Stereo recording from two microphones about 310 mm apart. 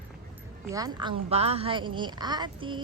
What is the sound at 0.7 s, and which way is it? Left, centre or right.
A man's voice, centre.